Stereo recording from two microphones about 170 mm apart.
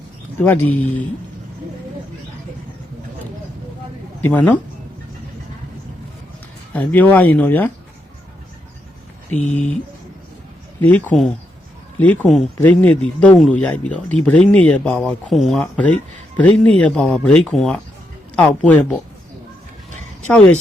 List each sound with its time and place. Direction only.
0.4 s speech: 10° left (ahead or behind)
4.2 s speech: 10° left (ahead or behind)
6.7 s speech: 10° left (ahead or behind)
9.4 s speech: 45° left (ahead or behind)
10.8 s speech: 10° left (ahead or behind)
20.2 s speech: 10° left (ahead or behind)